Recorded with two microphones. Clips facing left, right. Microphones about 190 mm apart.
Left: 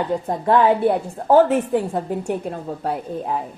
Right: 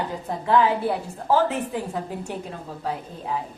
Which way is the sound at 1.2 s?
55° left (ahead or behind).